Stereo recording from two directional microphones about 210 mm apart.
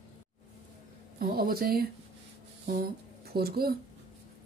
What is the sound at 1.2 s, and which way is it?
Speech, 45° right (ahead or behind).